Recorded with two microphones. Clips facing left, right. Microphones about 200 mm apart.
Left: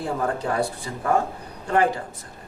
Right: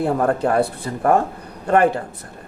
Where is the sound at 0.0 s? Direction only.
60° right (ahead or behind).